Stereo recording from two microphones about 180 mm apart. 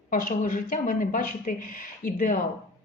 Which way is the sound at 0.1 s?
50° left (ahead or behind).